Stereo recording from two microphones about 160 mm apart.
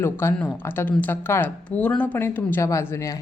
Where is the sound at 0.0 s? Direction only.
15° left (ahead or behind).